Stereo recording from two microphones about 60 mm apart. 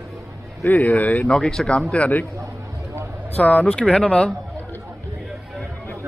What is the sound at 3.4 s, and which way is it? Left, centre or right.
Speech, centre.